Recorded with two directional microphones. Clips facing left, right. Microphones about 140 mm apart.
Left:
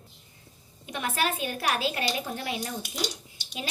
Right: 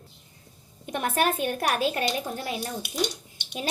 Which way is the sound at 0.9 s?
50° right (ahead or behind).